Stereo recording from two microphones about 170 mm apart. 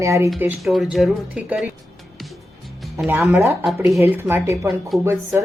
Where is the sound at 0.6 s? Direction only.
Centre (ahead or behind).